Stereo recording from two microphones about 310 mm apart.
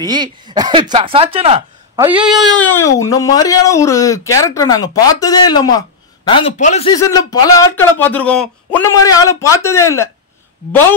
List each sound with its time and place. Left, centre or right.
0.0 s speech: centre
2.0 s speech: centre